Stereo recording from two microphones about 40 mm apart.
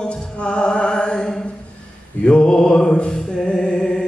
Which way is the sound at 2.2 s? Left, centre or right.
Left.